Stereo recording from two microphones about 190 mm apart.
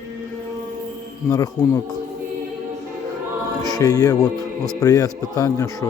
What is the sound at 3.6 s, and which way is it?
Speech, 20° left (ahead or behind).